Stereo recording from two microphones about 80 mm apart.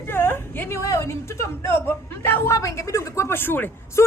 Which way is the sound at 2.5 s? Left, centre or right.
Left.